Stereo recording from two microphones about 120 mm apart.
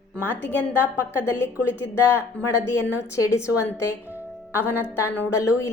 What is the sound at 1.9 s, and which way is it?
A woman's voice, 20° left (ahead or behind).